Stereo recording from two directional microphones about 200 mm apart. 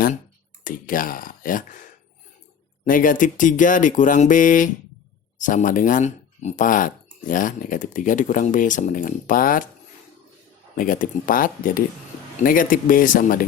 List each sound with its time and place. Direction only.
0.6 s speech: 45° left (ahead or behind)
2.8 s speech: 40° left (ahead or behind)
10.8 s speech: 45° left (ahead or behind)